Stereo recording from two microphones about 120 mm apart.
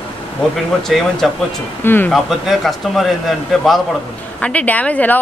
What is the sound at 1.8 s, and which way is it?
Speech, 15° left (ahead or behind).